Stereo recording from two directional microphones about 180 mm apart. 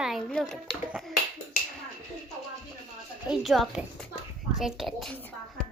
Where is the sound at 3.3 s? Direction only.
Centre (ahead or behind).